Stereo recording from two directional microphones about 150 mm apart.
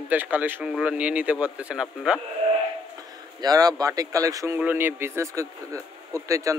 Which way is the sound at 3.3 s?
25° right (ahead or behind).